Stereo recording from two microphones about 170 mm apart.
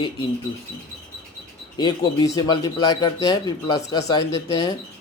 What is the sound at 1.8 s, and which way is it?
Speech, 25° left (ahead or behind).